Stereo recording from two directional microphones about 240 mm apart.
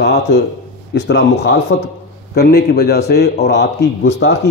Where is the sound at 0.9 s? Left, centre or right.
Left.